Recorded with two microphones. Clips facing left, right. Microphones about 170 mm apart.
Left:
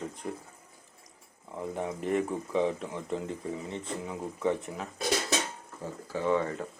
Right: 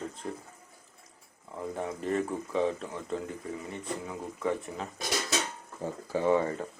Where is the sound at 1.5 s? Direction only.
15° left (ahead or behind).